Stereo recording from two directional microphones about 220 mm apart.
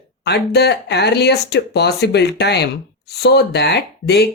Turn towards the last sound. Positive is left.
turn(degrees=50)  # may be behind; listen again after turning